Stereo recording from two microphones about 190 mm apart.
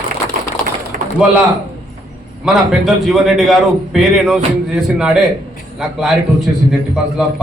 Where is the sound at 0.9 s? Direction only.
50° right (ahead or behind).